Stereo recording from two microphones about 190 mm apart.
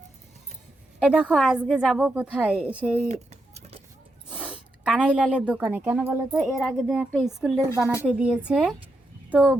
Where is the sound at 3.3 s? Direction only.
35° right (ahead or behind).